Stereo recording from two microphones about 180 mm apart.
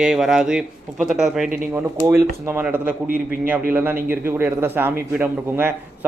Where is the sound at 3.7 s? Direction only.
10° right (ahead or behind).